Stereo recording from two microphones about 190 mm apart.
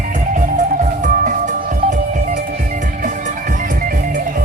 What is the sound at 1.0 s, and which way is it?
Music, 45° right (ahead or behind).